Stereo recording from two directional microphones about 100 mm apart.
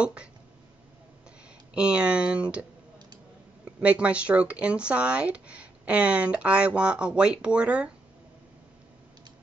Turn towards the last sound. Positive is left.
turn(degrees=-10)  # may be behind; listen again after turning